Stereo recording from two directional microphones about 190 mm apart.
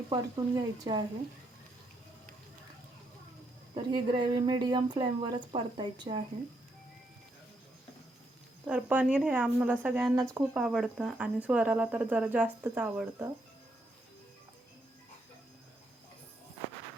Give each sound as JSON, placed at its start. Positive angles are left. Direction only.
{"t": 0.1, "sound": "speech", "side_deg": -20}
{"t": 3.8, "sound": "speech", "side_deg": -25}
{"t": 8.6, "sound": "speech", "side_deg": -10}